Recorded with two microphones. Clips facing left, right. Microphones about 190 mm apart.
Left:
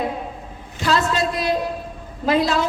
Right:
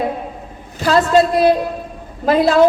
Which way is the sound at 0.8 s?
45° right (ahead or behind).